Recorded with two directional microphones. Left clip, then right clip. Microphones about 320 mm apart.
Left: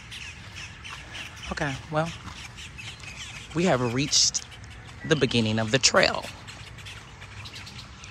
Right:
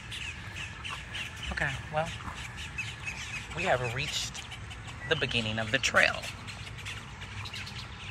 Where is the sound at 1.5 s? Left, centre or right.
Centre.